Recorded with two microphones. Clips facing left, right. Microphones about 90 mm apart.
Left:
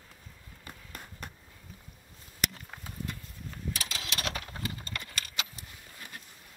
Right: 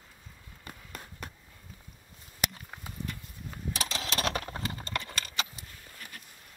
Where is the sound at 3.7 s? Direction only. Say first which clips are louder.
Right 7 dB; 30° right (ahead or behind).